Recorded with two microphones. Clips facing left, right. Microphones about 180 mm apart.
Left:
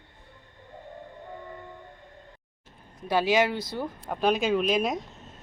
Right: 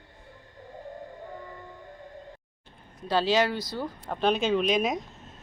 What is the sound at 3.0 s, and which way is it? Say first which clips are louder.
Speech: left 1 dB; 15° left (ahead or behind).